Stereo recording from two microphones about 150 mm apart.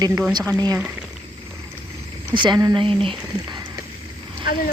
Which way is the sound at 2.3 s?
30° right (ahead or behind).